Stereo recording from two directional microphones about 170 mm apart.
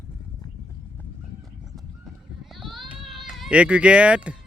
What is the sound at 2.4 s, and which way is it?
Baby cry, centre (ahead or behind).